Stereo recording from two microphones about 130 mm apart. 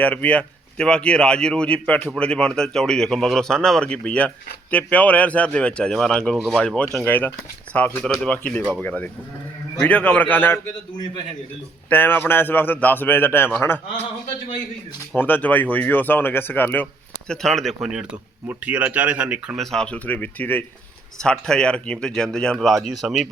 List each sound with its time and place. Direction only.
0.0 s speech: 10° left (ahead or behind)
11.9 s speech: 15° left (ahead or behind)
15.1 s speech: 15° left (ahead or behind)
17.4 s speech: centre (ahead or behind)
19.5 s speech: 5° left (ahead or behind)